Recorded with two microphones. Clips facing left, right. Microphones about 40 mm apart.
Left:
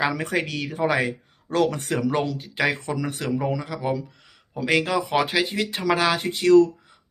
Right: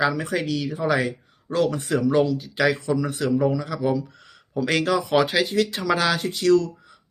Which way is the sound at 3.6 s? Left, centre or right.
Left.